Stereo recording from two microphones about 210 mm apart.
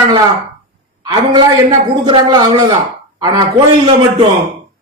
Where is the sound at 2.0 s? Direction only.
20° right (ahead or behind).